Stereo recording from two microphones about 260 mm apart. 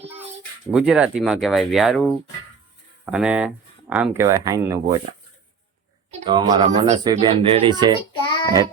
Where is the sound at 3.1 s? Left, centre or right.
Centre.